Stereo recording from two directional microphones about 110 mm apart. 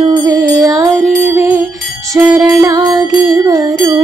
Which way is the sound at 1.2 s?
20° right (ahead or behind).